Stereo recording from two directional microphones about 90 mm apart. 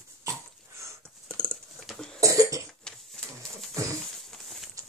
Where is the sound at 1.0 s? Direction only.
10° left (ahead or behind).